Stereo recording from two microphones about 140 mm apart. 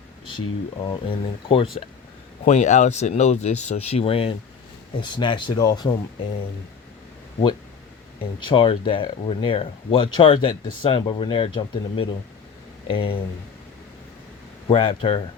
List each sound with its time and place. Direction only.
0.3 s speech: 35° left (ahead or behind)
2.4 s speech: 55° left (ahead or behind); by 5.9 s 30° left (ahead or behind)
8.4 s speech: 35° left (ahead or behind)
14.7 s speech: 35° left (ahead or behind)